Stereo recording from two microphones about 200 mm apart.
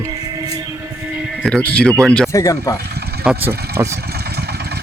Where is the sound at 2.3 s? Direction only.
15° left (ahead or behind).